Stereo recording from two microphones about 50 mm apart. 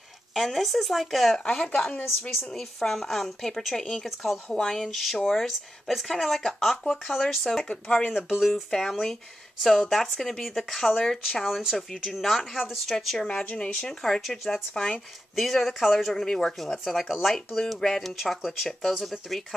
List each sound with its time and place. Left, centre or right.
0.3 s speech: centre
1.8 s speech: left
2.5 s a woman's voice: centre
4.8 s speech: centre
7.6 s speech: left
8.1 s speech: centre
8.6 s a woman's voice: centre
11.4 s a woman's voice: centre
13.4 s speech: left
13.7 s a woman's voice: centre
16.1 s a woman's voice: centre
16.8 s a woman's voice: centre
18.1 s speech: centre